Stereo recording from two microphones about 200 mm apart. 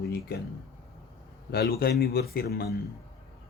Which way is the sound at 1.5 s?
50° left (ahead or behind).